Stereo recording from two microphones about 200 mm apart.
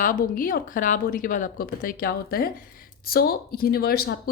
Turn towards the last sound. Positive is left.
turn(degrees=50)  # may be behind; listen again after turning